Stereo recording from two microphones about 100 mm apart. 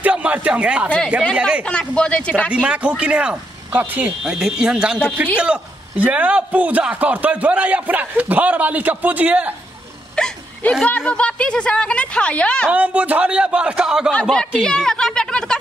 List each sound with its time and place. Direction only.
0.0 s a sound: 15° right (ahead or behind)
0.8 s speech: 10° left (ahead or behind)
1.3 s a man's voice: 10° right (ahead or behind)
1.6 s speech: 10° left (ahead or behind)
2.5 s a man's voice: 10° right (ahead or behind)
4.2 s a man's voice: 5° right (ahead or behind)
10.1 s speech: 10° left (ahead or behind)
12.7 s a man's voice: 15° right (ahead or behind)
14.6 s a sound: 5° left (ahead or behind)